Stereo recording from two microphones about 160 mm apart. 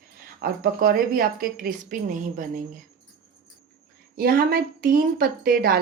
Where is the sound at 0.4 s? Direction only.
65° right (ahead or behind).